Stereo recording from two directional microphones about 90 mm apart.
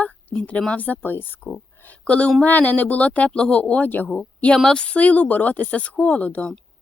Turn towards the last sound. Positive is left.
turn(degrees=15)  # may be behind; listen again after turning